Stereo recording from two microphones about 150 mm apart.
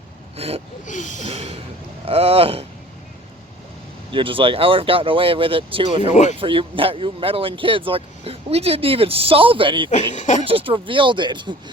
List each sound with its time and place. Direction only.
0.3 s speech: 40° right (ahead or behind)
0.9 s a sound: 55° left (ahead or behind)
1.2 s gasp: 45° right (ahead or behind)
2.0 s speech: 40° right (ahead or behind)
4.1 s speech: 35° right (ahead or behind)
6.0 s speech: 50° left (ahead or behind)
6.4 s speech: 35° right (ahead or behind)
9.9 s speech: 50° left (ahead or behind)
10.4 s speech: 35° right (ahead or behind)